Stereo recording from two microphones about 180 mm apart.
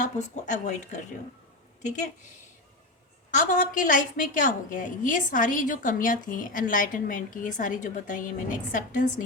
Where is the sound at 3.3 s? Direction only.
45° left (ahead or behind).